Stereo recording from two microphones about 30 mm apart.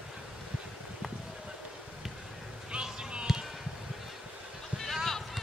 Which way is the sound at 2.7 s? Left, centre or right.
Right.